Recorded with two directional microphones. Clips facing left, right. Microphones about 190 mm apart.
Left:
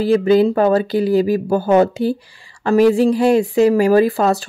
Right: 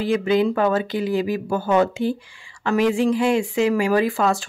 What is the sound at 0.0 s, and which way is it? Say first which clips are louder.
Speech: left 6 dB; 35° left (ahead or behind).